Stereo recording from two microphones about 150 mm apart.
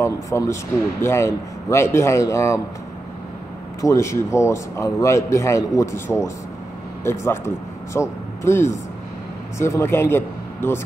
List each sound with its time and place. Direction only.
0.0 s a man's voice: 20° left (ahead or behind)
3.8 s a man's voice: 20° left (ahead or behind)